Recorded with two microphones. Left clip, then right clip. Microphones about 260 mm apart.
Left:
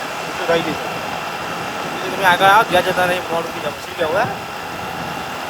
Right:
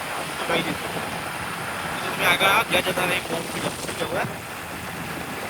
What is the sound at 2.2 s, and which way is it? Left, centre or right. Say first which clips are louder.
Speech: left 8 dB; centre.